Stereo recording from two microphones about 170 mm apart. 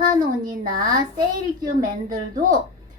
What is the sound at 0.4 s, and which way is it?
A woman's voice, 55° right (ahead or behind).